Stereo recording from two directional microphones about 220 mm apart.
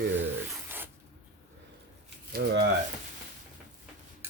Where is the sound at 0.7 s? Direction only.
10° right (ahead or behind).